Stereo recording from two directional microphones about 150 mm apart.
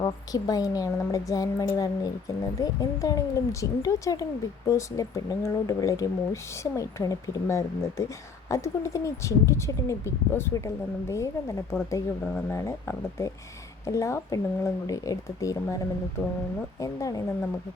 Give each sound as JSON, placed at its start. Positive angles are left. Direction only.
{"t": 0.0, "sound": "speech", "side_deg": 25}
{"t": 16.8, "sound": "speech", "side_deg": 20}